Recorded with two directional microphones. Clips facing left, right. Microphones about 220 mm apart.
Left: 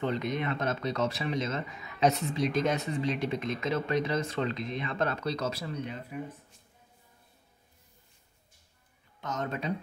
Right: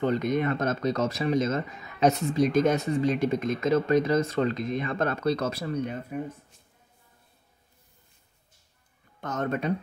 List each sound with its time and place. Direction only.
0.0 s speech: 45° right (ahead or behind)
9.2 s speech: 55° right (ahead or behind)